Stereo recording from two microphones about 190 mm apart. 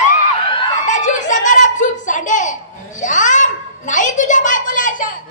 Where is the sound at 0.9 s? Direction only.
40° left (ahead or behind).